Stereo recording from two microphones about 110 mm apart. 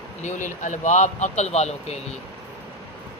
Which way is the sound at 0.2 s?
90° left.